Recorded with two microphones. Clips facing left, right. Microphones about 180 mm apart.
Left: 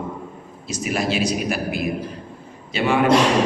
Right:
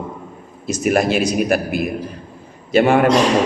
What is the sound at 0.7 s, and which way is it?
Speech, 50° right (ahead or behind).